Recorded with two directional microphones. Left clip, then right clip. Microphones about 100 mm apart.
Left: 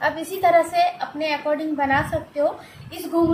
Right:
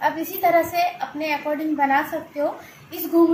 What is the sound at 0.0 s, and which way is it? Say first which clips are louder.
A woman's voice: left 1 dB; 25° left (ahead or behind).